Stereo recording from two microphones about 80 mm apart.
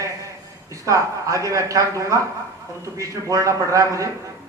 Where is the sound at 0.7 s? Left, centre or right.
Right.